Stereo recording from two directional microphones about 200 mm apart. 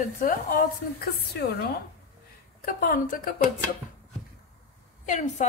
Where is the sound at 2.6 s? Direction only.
45° left (ahead or behind).